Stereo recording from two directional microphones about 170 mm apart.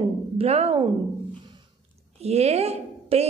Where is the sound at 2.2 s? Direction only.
40° right (ahead or behind).